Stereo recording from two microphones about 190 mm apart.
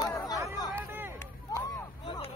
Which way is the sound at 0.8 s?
10° right (ahead or behind).